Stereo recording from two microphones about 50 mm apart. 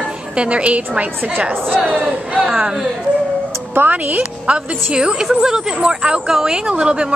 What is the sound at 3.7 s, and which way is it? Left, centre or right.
Speech, right.